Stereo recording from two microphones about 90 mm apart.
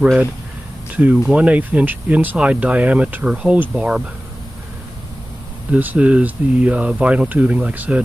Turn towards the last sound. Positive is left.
turn(degrees=-15)  # may be behind; listen again after turning